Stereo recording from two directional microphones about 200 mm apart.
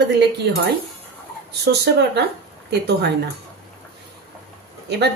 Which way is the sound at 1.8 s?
55° right (ahead or behind).